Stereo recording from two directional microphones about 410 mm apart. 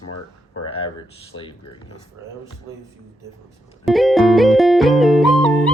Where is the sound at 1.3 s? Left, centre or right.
Left.